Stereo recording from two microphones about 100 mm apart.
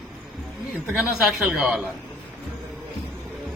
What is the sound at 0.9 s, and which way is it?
Speech, 5° right (ahead or behind).